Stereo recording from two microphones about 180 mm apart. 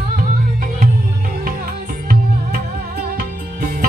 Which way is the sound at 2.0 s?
55° right (ahead or behind).